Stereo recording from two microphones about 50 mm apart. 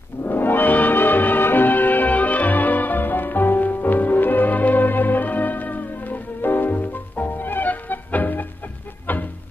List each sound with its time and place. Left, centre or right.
0.2 s music: left